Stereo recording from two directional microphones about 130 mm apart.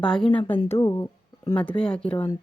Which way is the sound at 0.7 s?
25° left (ahead or behind).